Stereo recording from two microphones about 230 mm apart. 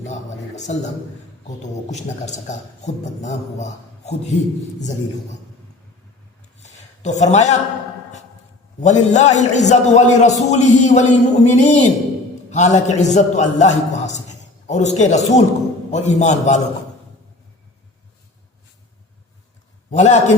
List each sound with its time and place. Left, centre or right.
0.1 s a man's voice: left
6.6 s a sound: left
8.8 s a man's voice: left
19.9 s a man's voice: left